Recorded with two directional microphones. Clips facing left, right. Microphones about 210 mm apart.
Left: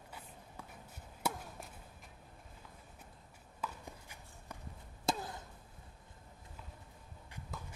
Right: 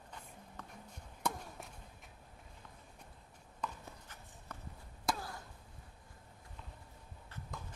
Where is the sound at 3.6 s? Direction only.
10° left (ahead or behind).